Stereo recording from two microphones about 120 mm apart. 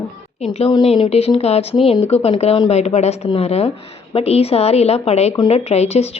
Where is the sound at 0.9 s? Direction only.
55° left (ahead or behind).